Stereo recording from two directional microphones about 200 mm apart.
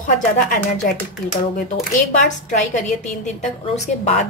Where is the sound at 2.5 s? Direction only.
35° left (ahead or behind).